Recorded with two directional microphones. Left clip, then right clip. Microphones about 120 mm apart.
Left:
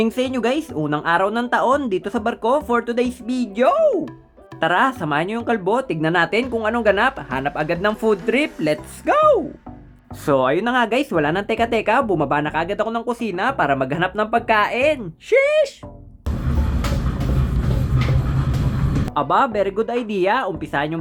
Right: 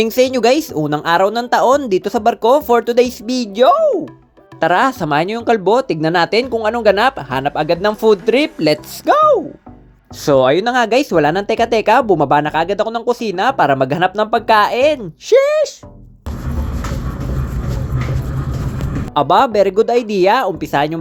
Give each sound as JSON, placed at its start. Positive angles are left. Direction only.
{"t": 0.0, "sound": "speech", "side_deg": -30}
{"t": 3.5, "sound": "speech", "side_deg": -20}
{"t": 4.6, "sound": "speech", "side_deg": -30}
{"t": 5.0, "sound": "speech", "side_deg": -40}
{"t": 9.0, "sound": "speech", "side_deg": -15}
{"t": 15.4, "sound": "speech", "side_deg": -15}
{"t": 19.1, "sound": "speech", "side_deg": -35}